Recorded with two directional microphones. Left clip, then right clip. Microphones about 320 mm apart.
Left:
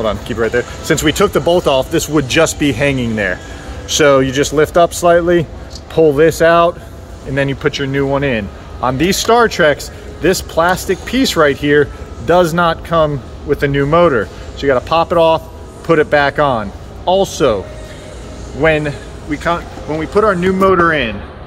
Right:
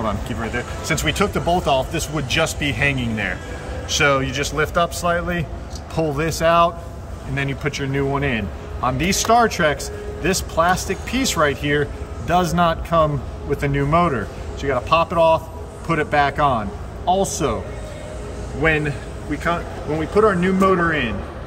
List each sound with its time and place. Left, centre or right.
0.0 s speech: centre
18.6 s speech: centre